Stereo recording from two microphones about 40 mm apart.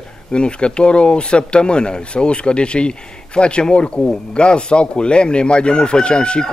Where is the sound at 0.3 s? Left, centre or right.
Left.